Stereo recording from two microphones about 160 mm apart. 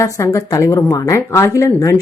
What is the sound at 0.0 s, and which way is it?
Speech, 20° left (ahead or behind).